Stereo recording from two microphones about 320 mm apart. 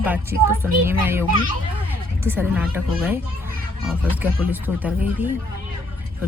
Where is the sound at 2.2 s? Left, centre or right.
Centre.